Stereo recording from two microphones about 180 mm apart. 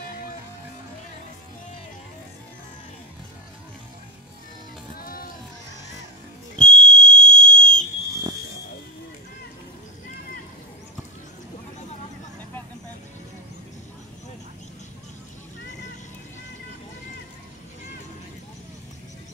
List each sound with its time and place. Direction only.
4.9 s music: 50° left (ahead or behind)
6.7 s whistle: 45° left (ahead or behind)